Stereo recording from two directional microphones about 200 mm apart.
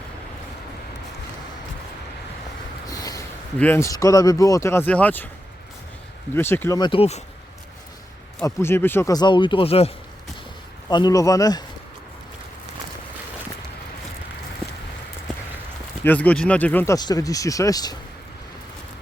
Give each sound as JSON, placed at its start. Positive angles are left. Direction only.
{"t": 2.9, "sound": "a sound", "side_deg": 15}
{"t": 3.6, "sound": "speech", "side_deg": 10}
{"t": 6.3, "sound": "speech", "side_deg": 10}
{"t": 8.4, "sound": "speech", "side_deg": 10}
{"t": 16.0, "sound": "speech", "side_deg": 10}